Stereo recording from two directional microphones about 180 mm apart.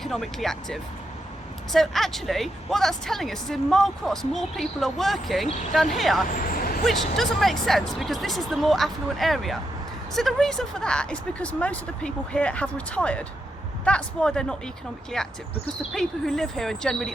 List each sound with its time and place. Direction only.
0.0 s a woman's voice: centre (ahead or behind)
6.3 s vehicle: 50° left (ahead or behind)
6.8 s a woman's voice: centre (ahead or behind)